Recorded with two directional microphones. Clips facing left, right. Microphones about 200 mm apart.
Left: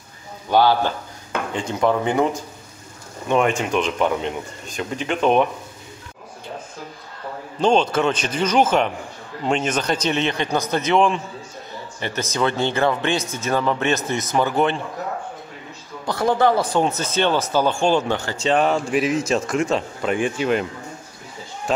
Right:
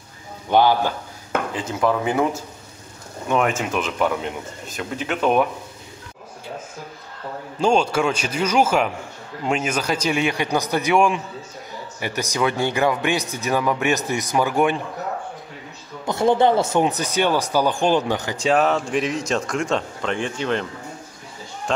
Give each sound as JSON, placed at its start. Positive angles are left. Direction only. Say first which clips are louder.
{"t": 0.5, "sound": "speech", "louder": "even", "side_deg": -15}
{"t": 1.5, "sound": "speech", "louder": "left 3 dB", "side_deg": -5}
{"t": 7.6, "sound": "speech", "louder": "left 1 dB", "side_deg": -10}
{"t": 16.1, "sound": "speech", "louder": "right 1 dB", "side_deg": -25}
{"t": 18.5, "sound": "speech", "louder": "even", "side_deg": 0}
{"t": 21.7, "sound": "speech", "louder": "left 1 dB", "side_deg": 5}